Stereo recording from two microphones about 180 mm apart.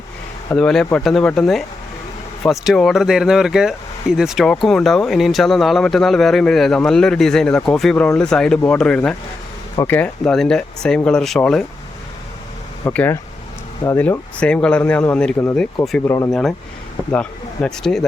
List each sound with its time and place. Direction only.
0.5 s speech: 5° left (ahead or behind)
12.8 s speech: 10° left (ahead or behind)
16.3 s speech: centre (ahead or behind)